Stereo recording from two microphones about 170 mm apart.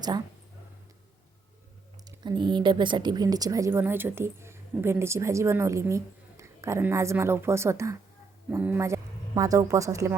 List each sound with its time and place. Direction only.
2.0 s a woman's voice: 25° right (ahead or behind)